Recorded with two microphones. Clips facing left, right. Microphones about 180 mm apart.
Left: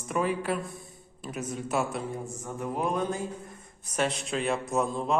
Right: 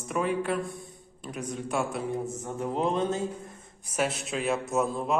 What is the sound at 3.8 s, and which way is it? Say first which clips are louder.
A woman's voice: even; 5° right (ahead or behind).